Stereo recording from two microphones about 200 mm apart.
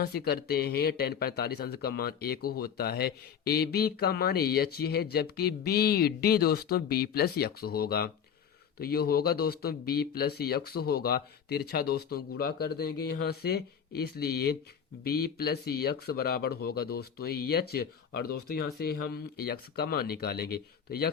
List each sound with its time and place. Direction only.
0.0 s speech: 50° left (ahead or behind)